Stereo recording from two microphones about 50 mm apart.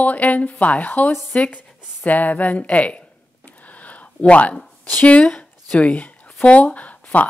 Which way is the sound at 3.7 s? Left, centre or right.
Left.